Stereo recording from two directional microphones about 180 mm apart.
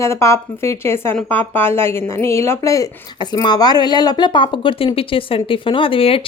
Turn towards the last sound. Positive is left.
turn(degrees=30)  # may be behind; listen again after turning